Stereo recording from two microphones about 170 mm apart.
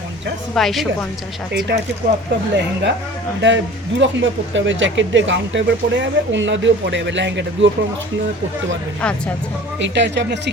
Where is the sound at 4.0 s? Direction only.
90° right.